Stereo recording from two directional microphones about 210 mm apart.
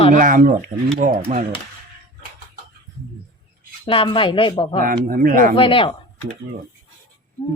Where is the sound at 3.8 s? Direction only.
25° left (ahead or behind).